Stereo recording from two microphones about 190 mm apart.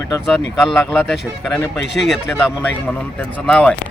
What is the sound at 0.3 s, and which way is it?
Speech, 5° left (ahead or behind).